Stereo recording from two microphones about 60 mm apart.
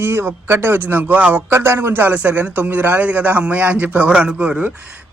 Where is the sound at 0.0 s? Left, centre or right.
Right.